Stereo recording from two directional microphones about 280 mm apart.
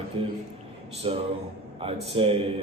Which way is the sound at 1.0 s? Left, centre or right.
Centre.